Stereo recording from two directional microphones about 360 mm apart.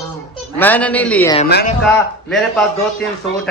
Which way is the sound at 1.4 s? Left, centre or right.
Left.